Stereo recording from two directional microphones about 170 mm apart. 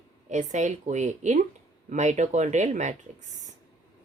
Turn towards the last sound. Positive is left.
turn(degrees=-45)  # may be behind; listen again after turning